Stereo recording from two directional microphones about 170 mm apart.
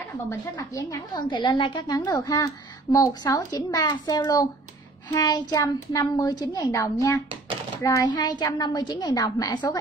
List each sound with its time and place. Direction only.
0.3 s a woman's voice: 20° left (ahead or behind)